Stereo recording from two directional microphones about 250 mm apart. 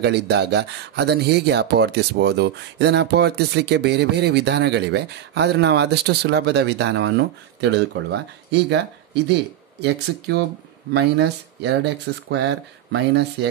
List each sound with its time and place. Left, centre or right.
0.0 s speech: right